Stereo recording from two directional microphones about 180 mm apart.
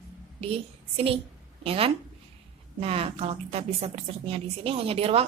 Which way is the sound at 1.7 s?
30° right (ahead or behind).